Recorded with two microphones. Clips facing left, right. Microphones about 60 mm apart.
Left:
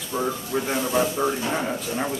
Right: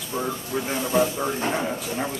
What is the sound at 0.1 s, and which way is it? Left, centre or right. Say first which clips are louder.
A man's voice: left 2 dB; centre.